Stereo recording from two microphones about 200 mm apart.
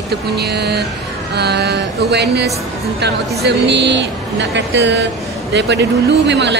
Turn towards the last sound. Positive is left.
turn(degrees=-60)  # may be behind; listen again after turning